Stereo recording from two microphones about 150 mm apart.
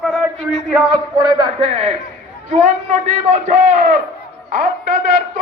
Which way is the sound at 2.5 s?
55° right (ahead or behind).